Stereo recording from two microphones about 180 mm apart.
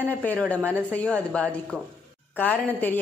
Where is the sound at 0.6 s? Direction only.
10° right (ahead or behind).